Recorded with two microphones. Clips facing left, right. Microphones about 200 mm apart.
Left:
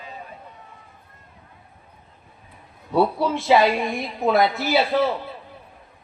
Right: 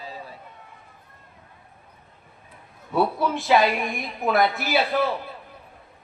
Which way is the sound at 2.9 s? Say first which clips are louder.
Left 3 dB; 20° left (ahead or behind).